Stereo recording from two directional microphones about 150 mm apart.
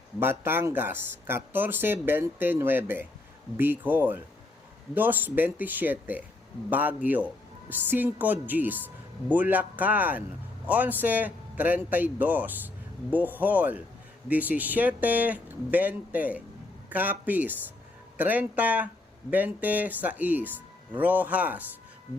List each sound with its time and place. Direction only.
0.2 s a man's voice: 15° right (ahead or behind)